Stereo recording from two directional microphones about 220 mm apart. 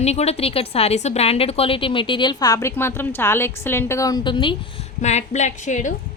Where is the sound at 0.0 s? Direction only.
30° left (ahead or behind).